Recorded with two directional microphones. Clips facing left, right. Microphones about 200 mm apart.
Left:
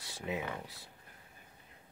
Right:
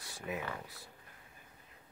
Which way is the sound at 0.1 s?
20° left (ahead or behind).